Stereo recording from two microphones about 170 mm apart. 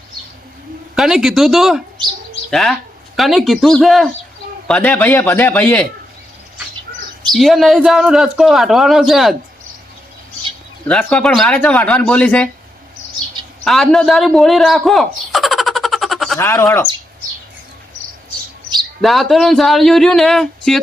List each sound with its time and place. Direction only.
0.9 s a man's voice: 5° right (ahead or behind)
7.3 s a man's voice: centre (ahead or behind)
10.8 s speech: 5° left (ahead or behind)
13.7 s a sound: centre (ahead or behind)
16.4 s speech: 15° left (ahead or behind)
19.0 s a man's voice: centre (ahead or behind)